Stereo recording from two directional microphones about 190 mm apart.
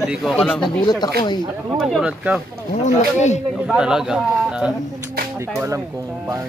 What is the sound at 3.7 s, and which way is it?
A man's voice, 5° right (ahead or behind).